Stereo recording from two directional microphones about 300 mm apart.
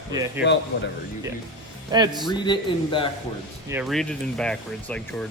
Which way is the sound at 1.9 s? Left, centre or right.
Centre.